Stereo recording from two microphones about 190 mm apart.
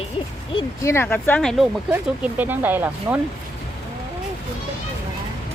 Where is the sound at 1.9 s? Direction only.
10° right (ahead or behind).